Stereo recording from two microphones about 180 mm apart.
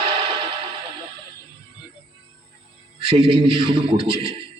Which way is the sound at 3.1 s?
30° right (ahead or behind).